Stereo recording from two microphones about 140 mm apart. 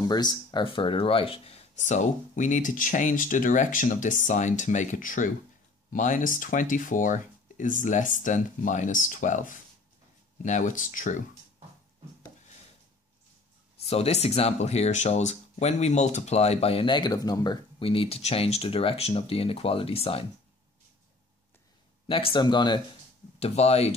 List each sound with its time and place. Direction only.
0.1 s speech: 30° left (ahead or behind); by 11.2 s 65° left (ahead or behind)
13.8 s speech: 50° left (ahead or behind)
22.0 s speech: 40° left (ahead or behind)
23.4 s speech: 45° left (ahead or behind)